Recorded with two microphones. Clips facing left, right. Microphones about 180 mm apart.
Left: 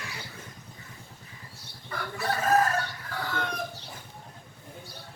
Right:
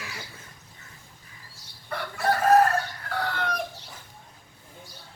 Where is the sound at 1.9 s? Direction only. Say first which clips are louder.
Right 5 dB; 65° right (ahead or behind).